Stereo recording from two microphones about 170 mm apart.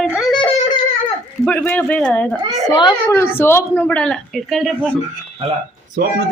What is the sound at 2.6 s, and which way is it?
Speech, 25° left (ahead or behind).